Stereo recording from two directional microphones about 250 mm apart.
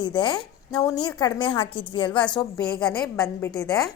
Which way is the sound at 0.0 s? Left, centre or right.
Centre.